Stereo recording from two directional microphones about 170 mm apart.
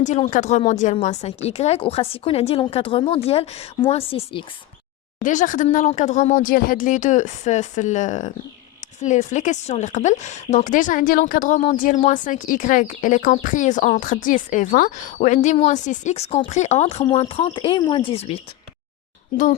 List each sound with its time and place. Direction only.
0.0 s speech: 45° left (ahead or behind)
5.2 s speech: 50° left (ahead or behind)